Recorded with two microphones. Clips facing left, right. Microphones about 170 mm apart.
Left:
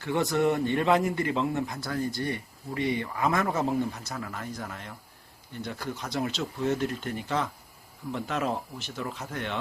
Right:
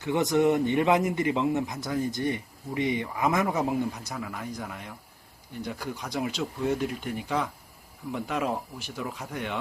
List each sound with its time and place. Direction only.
0.0 s a man's voice: 20° right (ahead or behind)